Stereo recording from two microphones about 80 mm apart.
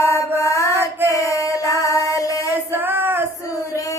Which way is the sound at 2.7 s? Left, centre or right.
Right.